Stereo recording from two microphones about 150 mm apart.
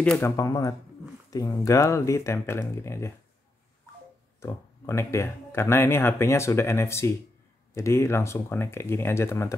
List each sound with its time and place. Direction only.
0.0 s speech: 5° left (ahead or behind)
0.4 s speech: 20° left (ahead or behind)
4.4 s speech: 20° left (ahead or behind)